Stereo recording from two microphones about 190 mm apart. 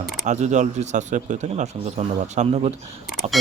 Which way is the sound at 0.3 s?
40° right (ahead or behind).